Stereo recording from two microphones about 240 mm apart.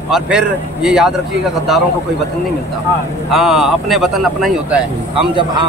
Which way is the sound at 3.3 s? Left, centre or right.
Centre.